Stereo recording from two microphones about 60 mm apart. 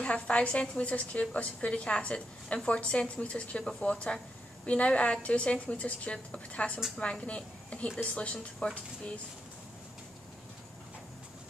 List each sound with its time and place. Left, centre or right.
0.0 s a woman's voice: left